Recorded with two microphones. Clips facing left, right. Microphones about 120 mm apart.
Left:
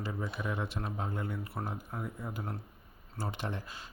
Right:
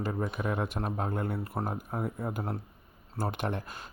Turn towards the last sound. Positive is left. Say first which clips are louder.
# right 5 dB
turn(degrees=-55)  # may be behind; listen again after turning